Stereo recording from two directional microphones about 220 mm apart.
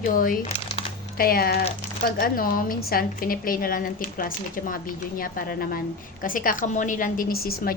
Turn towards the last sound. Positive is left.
turn(degrees=45)  # may be behind; listen again after turning